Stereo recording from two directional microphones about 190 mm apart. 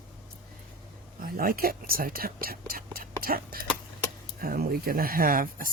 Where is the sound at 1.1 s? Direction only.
50° right (ahead or behind).